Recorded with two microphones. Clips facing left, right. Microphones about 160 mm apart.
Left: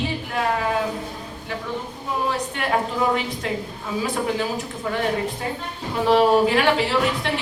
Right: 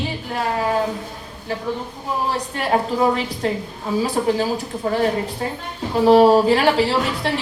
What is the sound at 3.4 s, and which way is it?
A woman's voice, 35° right (ahead or behind).